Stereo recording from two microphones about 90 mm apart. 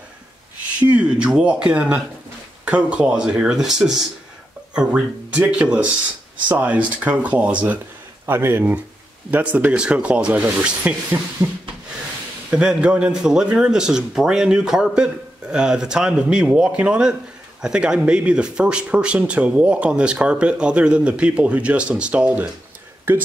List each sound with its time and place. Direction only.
0.7 s speech: 15° right (ahead or behind)
11.4 s speech: 25° right (ahead or behind)
12.4 s speech: 10° right (ahead or behind)